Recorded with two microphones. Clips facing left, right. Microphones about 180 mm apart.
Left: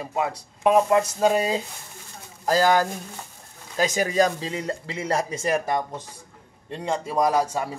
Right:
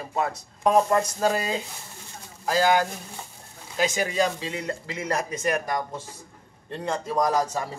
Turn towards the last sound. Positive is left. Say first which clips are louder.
# left 2 dB
turn(degrees=10)  # may be behind; listen again after turning